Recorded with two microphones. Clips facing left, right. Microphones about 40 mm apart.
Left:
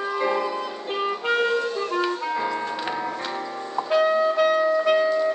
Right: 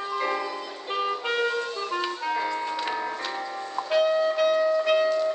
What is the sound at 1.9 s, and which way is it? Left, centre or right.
Music, centre.